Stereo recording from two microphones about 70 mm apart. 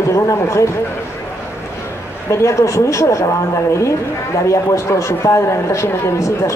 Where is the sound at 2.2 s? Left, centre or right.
Left.